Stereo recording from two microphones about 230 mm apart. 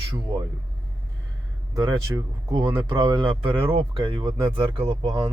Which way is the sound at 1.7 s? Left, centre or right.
Centre.